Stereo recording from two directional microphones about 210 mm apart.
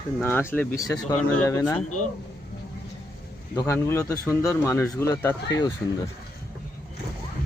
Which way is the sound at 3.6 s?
15° left (ahead or behind).